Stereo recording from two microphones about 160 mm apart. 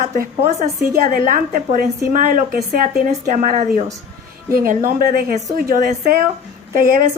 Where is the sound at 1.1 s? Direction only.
55° right (ahead or behind).